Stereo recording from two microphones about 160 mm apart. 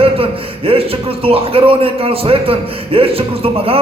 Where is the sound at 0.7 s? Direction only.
35° right (ahead or behind).